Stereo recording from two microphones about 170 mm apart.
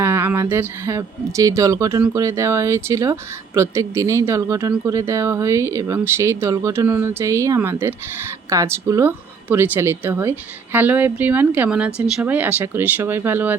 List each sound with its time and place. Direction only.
0.0 s a woman's voice: 15° right (ahead or behind)